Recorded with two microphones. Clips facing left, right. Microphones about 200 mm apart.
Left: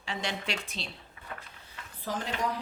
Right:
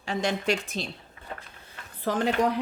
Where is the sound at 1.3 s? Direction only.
30° right (ahead or behind).